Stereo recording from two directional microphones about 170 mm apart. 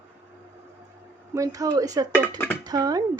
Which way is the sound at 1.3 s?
20° right (ahead or behind).